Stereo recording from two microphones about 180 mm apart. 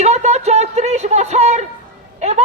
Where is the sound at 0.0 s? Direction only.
40° right (ahead or behind).